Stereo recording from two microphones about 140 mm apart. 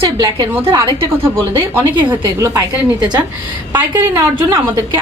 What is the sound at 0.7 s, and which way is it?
Speech, 20° right (ahead or behind).